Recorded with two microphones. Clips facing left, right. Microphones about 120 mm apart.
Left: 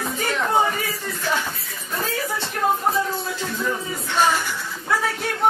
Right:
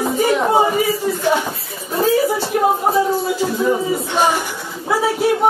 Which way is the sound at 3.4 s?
20° right (ahead or behind).